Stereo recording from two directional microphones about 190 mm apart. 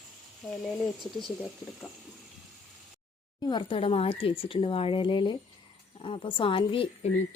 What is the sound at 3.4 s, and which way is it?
Speech, 25° left (ahead or behind).